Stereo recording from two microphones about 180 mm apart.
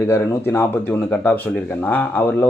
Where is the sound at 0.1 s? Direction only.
15° left (ahead or behind).